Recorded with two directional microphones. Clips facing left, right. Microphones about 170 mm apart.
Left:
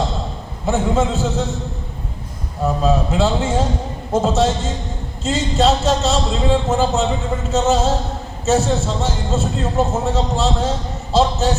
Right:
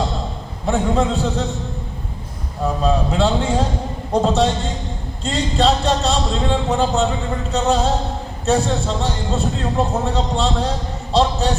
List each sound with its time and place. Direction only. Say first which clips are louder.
0.6 s a man's voice: even; centre (ahead or behind)
2.8 s a man's voice: even; 5° left (ahead or behind)